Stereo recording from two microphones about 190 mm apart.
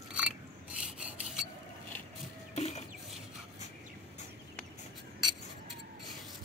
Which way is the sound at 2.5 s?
35° left (ahead or behind).